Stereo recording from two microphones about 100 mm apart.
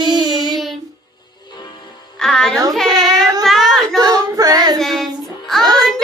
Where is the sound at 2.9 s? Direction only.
40° right (ahead or behind).